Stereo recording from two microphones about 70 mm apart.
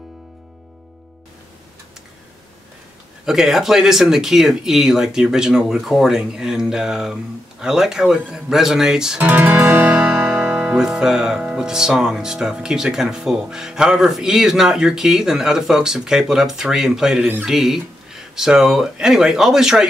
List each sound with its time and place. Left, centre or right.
3.3 s speech: centre
9.2 s guitar: right; by 11.4 s centre
11.5 s speech: centre